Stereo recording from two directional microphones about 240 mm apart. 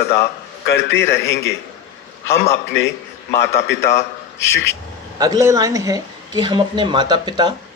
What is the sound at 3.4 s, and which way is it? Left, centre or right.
Speech, left.